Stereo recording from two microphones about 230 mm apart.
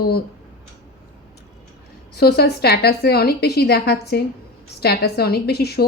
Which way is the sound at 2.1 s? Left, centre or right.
Left.